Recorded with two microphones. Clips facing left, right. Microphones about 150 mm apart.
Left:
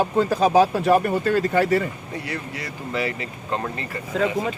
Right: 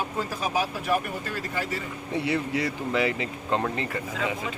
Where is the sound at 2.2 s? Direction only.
20° right (ahead or behind).